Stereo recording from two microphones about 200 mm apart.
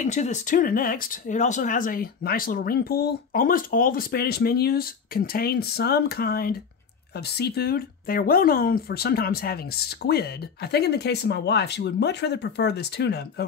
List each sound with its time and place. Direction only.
0.0 s speech: 35° left (ahead or behind); by 13.5 s 55° left (ahead or behind)